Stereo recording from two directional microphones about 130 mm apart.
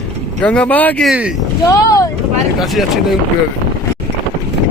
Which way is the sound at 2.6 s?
Centre (ahead or behind).